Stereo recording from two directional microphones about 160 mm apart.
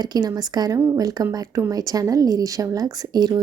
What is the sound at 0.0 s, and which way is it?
Speech, 25° right (ahead or behind).